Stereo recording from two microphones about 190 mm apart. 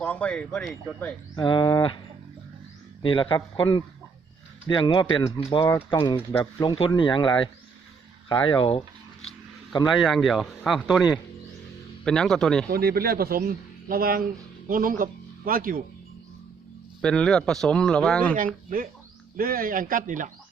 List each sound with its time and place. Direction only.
0.0 s speech: 5° left (ahead or behind)
1.4 s speech: 25° left (ahead or behind)
3.0 s speech: 25° left (ahead or behind)
4.7 s speech: 25° left (ahead or behind)
10.0 s speech: centre (ahead or behind)
12.7 s a man's voice: 55° right (ahead or behind)
17.0 s speech: 5° left (ahead or behind)
18.3 s a man's voice: 45° right (ahead or behind)